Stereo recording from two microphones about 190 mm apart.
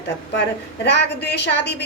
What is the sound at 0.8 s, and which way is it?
A woman's voice, 60° left (ahead or behind).